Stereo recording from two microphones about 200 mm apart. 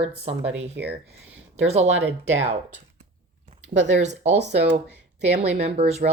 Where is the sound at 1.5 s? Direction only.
35° right (ahead or behind).